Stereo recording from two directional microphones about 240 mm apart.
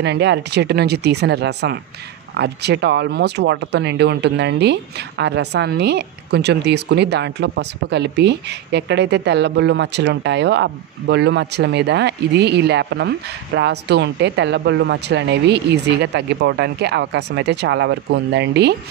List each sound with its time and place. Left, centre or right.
0.0 s speech: right